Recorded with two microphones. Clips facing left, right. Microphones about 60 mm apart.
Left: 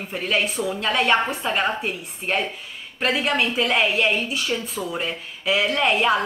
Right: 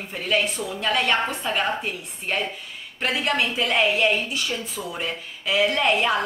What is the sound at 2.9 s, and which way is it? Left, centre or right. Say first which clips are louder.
A woman's voice: left 2 dB; centre.